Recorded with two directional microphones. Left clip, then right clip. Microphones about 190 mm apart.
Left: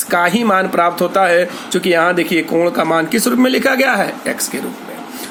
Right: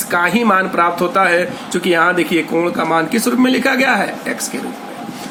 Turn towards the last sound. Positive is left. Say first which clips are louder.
# even
turn(degrees=35)  # may be behind; listen again after turning